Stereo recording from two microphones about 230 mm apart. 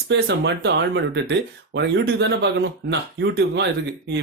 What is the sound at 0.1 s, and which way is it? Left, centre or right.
Speech, right.